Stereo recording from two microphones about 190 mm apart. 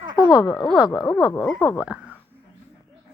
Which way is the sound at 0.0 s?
25° right (ahead or behind).